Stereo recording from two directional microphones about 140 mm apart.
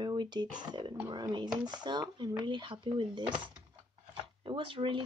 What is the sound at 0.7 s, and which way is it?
Speech, 35° right (ahead or behind).